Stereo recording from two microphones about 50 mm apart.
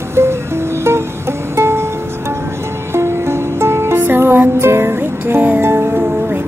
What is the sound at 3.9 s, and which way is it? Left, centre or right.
Music, right.